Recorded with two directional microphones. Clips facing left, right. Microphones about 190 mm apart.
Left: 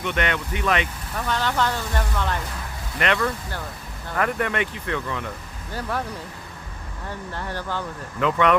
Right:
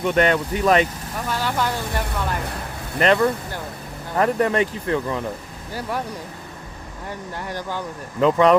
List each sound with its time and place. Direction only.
0.0 s speech: 40° right (ahead or behind)
1.3 s speech: 10° right (ahead or behind)
3.0 s speech: 30° right (ahead or behind)
5.7 s speech: 10° right (ahead or behind)
7.3 s speech: 15° right (ahead or behind)
8.2 s speech: 35° right (ahead or behind)